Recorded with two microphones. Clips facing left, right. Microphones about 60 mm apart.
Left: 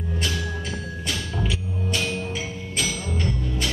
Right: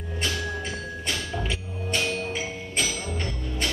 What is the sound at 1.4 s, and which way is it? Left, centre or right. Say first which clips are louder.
Hammer: left 3 dB; centre.